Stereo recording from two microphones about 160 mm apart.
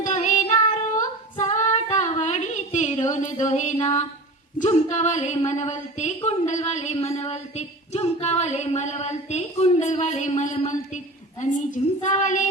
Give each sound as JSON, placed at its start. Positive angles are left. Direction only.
{"t": 0.0, "sound": "child singing", "side_deg": 50}
{"t": 0.9, "sound": "female singing", "side_deg": 50}
{"t": 4.6, "sound": "speech", "side_deg": 45}